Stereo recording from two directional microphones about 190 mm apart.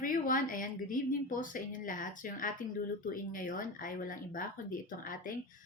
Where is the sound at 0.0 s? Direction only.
45° left (ahead or behind).